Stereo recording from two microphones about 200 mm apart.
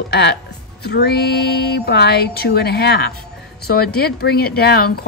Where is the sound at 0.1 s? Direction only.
55° left (ahead or behind).